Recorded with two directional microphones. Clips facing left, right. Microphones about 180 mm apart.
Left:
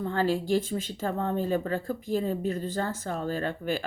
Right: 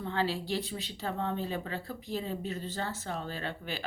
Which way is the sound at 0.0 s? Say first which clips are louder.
Left 5 dB; 45° left (ahead or behind).